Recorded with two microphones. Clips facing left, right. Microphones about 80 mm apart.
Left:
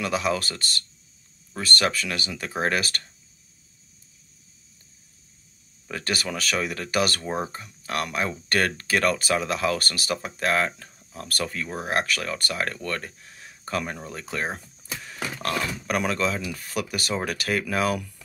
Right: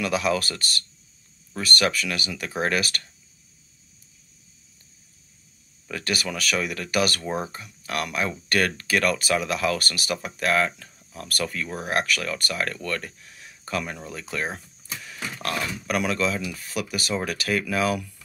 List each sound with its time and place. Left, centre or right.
0.0 s speech: left
5.9 s speech: left